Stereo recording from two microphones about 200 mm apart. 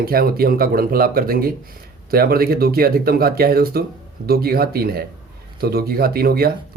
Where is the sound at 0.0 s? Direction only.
50° right (ahead or behind).